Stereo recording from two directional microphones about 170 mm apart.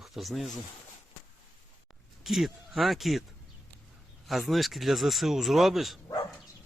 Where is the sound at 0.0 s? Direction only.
Centre (ahead or behind).